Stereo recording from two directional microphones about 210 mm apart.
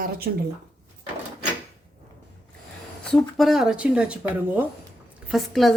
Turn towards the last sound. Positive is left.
turn(degrees=0)  # may be behind; listen again after turning